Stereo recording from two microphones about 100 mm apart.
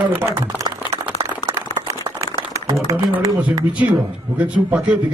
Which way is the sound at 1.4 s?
40° right (ahead or behind).